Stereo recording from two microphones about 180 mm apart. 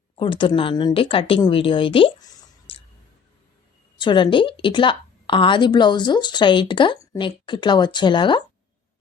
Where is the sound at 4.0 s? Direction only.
25° left (ahead or behind).